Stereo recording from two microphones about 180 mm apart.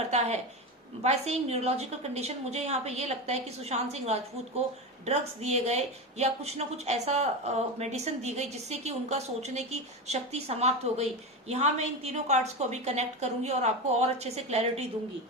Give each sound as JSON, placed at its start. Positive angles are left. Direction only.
{"t": 1.0, "sound": "speech", "side_deg": -35}